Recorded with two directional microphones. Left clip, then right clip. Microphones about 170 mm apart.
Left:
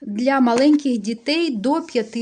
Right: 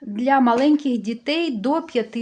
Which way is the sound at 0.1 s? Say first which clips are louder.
Even; 30° left (ahead or behind).